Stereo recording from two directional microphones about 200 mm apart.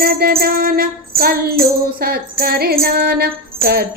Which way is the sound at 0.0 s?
50° right (ahead or behind).